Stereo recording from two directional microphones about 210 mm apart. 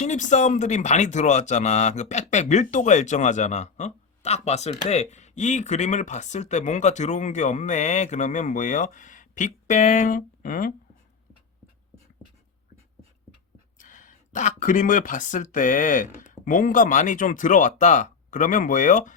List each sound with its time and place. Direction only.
0.0 s speech: 35° left (ahead or behind)
13.7 s speech: 35° left (ahead or behind)